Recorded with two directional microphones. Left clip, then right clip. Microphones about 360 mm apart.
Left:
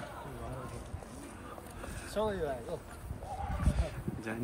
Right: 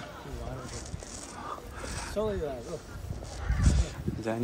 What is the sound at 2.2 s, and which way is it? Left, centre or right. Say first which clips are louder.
Speech: right 2 dB; centre.